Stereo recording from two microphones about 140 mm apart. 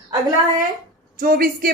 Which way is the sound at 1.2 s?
90° right.